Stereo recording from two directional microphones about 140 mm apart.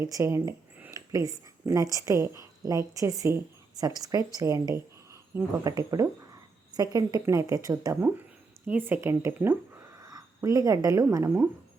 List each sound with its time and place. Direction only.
0.0 s speech: 20° right (ahead or behind)